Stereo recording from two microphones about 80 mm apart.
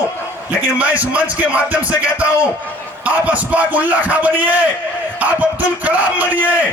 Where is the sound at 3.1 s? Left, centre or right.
Centre.